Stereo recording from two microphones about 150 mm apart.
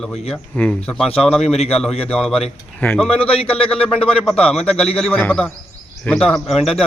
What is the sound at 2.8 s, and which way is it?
Speech, 10° left (ahead or behind).